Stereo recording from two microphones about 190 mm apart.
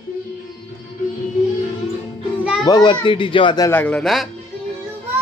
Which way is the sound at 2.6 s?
25° left (ahead or behind).